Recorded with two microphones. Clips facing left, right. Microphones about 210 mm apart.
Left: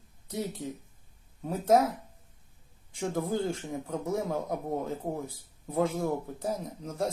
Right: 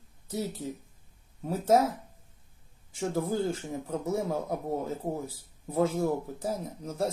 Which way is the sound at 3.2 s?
5° right (ahead or behind).